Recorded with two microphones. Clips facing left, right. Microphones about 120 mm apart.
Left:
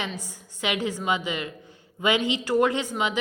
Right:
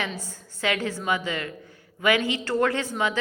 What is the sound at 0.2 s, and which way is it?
A woman's voice, 15° left (ahead or behind).